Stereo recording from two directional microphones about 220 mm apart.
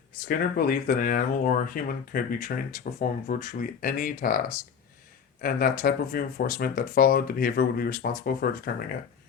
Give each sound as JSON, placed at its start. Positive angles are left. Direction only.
{"t": 0.3, "sound": "speech", "side_deg": 40}